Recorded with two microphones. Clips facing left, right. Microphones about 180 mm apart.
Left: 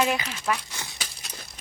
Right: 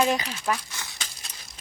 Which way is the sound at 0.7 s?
15° left (ahead or behind).